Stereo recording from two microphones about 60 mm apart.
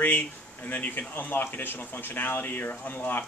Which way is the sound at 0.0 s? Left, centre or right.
Left.